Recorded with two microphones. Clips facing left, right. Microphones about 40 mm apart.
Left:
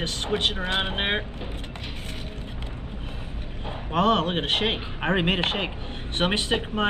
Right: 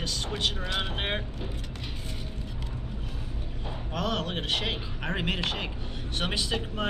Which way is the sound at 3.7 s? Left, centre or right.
Left.